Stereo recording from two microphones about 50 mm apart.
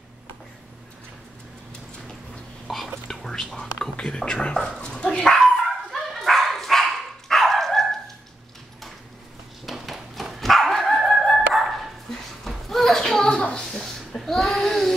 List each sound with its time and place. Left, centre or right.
2.7 s speech: centre
3.1 s whispering: centre
3.9 s speech: centre
5.7 s dog: centre
9.7 s dog: centre
12.4 s a sound: centre